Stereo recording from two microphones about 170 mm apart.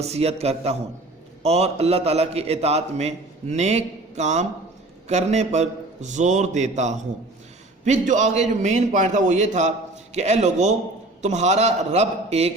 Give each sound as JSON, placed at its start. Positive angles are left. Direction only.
{"t": 0.0, "sound": "a man's voice", "side_deg": -40}